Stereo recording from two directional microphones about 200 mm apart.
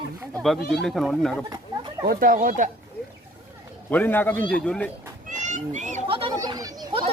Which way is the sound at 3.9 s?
10° left (ahead or behind).